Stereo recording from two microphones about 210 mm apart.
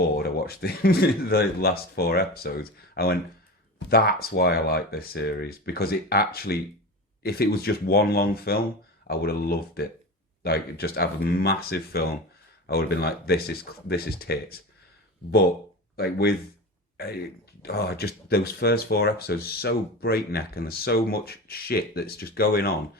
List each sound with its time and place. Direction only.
0.0 s speech: 50° left (ahead or behind)
16.0 s speech: 50° left (ahead or behind)
17.6 s speech: 50° left (ahead or behind)